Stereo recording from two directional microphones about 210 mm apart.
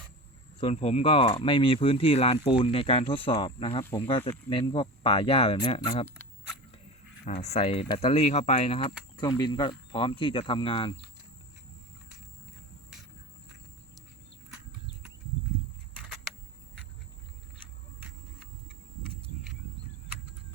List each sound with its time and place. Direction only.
0.6 s speech: 30° left (ahead or behind)
6.1 s a sound: 10° left (ahead or behind)
7.3 s speech: 30° left (ahead or behind)